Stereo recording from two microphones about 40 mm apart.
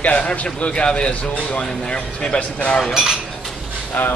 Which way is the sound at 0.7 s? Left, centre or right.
Left.